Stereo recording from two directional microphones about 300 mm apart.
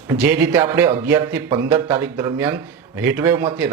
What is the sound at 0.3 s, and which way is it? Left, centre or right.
Speech, centre.